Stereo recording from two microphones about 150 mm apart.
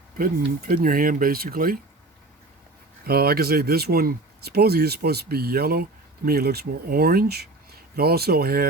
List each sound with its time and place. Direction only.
0.2 s speech: 70° right (ahead or behind)
3.0 s speech: 90° right